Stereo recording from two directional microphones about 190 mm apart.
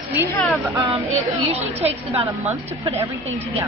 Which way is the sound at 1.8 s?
30° right (ahead or behind).